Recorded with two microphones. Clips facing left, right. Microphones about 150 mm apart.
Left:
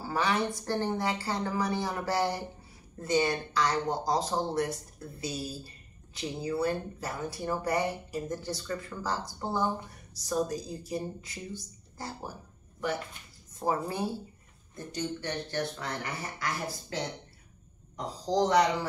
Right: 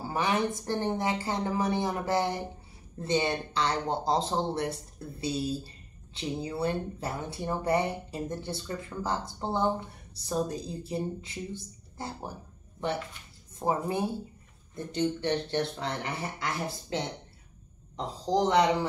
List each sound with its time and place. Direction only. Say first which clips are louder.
0.0 s a sound: right 1 dB; 20° right (ahead or behind)
0.6 s speech: right 1 dB; 20° right (ahead or behind)
6.1 s speech: left 1 dB; 25° right (ahead or behind)
17.9 s speech: right 1 dB; 25° right (ahead or behind)